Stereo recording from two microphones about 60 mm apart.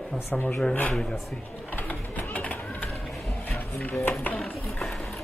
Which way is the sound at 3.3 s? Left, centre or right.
Left.